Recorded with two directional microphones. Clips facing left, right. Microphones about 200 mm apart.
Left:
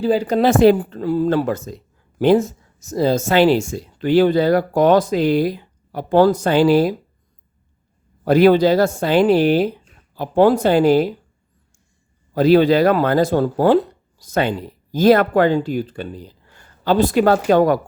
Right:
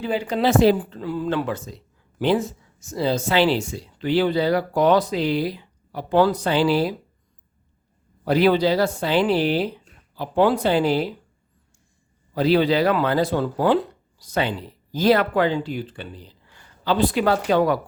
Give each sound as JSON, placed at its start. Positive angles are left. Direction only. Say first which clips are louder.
{"t": 0.0, "sound": "speech", "louder": "left 6 dB", "side_deg": 40}
{"t": 8.2, "sound": "speech", "louder": "left 6 dB", "side_deg": 50}
{"t": 12.3, "sound": "speech", "louder": "left 6 dB", "side_deg": 45}